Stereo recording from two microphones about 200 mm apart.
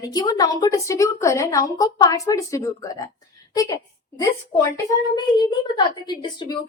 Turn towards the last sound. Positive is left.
turn(degrees=20)  # may be behind; listen again after turning